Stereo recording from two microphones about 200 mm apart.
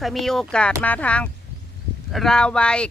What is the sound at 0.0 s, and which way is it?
A woman's voice, centre (ahead or behind).